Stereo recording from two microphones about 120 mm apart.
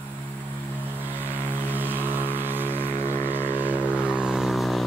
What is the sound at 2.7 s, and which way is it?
Vehicle, 15° left (ahead or behind).